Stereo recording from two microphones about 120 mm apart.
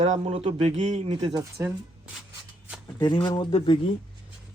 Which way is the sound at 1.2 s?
30° right (ahead or behind).